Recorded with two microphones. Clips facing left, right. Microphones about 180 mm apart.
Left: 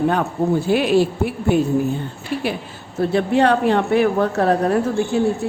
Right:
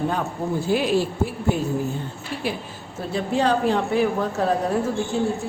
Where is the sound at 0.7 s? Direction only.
65° left (ahead or behind).